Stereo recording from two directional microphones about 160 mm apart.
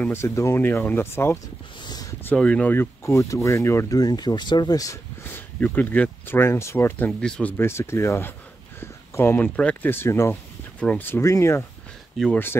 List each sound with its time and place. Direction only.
0.0 s speech: 15° left (ahead or behind)
1.9 s a sound: 25° left (ahead or behind)
2.2 s speech: 5° left (ahead or behind)
5.6 s speech: 10° left (ahead or behind)